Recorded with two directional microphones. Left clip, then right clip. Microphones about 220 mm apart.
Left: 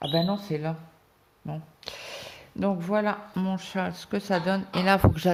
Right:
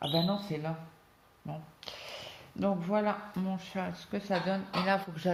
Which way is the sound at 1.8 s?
40° left (ahead or behind).